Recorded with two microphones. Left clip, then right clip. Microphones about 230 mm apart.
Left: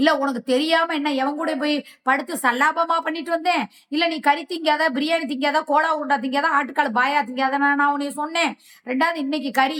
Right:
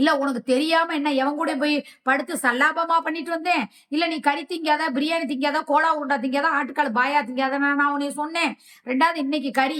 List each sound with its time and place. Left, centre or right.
0.0 s a woman's voice: centre